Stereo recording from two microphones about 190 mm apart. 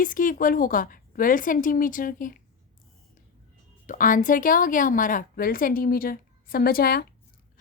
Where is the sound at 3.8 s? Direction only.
45° left (ahead or behind).